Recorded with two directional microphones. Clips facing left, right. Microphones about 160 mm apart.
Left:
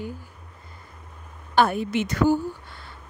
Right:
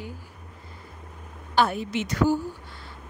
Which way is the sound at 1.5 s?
55° left (ahead or behind).